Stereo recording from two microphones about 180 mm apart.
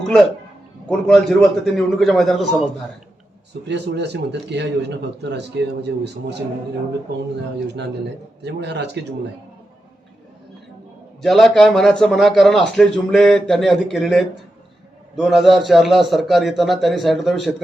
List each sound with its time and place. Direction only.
0.9 s a man's voice: centre (ahead or behind)
3.7 s a man's voice: 70° right (ahead or behind)
8.4 s a man's voice: 70° right (ahead or behind)
11.2 s a man's voice: centre (ahead or behind)